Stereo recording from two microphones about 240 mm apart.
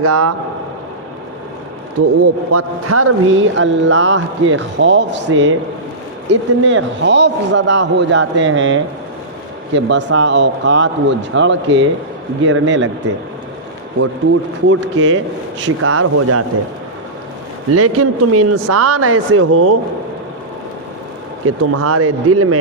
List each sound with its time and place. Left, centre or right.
0.0 s speech: right
2.0 s speech: right
14.7 s speech: right
17.7 s speech: right
21.4 s speech: right